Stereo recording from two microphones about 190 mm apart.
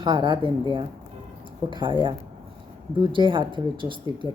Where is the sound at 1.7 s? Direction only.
25° right (ahead or behind).